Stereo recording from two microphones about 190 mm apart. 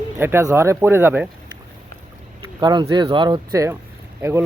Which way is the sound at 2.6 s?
25° right (ahead or behind).